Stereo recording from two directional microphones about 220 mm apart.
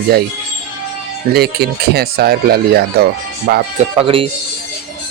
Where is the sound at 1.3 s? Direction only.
45° right (ahead or behind).